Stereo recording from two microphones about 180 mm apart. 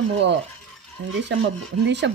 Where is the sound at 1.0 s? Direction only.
90° right.